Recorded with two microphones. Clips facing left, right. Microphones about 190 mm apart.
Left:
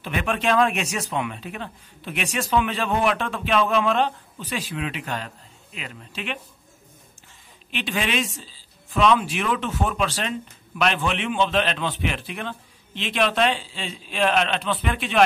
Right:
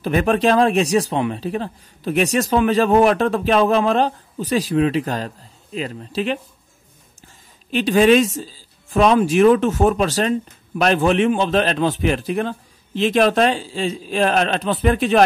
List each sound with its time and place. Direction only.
0.0 s speech: 40° right (ahead or behind)
7.7 s speech: 40° right (ahead or behind)